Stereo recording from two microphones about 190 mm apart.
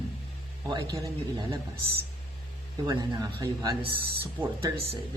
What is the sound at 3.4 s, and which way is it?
Speech, 20° right (ahead or behind).